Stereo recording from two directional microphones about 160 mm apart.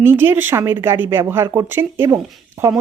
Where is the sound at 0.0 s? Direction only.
15° right (ahead or behind).